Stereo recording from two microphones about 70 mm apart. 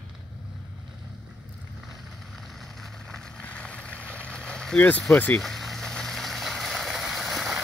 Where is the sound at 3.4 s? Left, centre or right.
Centre.